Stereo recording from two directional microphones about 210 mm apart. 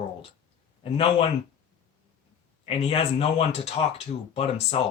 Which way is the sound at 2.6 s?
30° left (ahead or behind).